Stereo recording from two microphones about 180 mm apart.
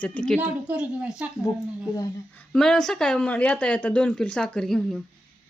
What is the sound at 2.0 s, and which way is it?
A woman's voice, 10° left (ahead or behind).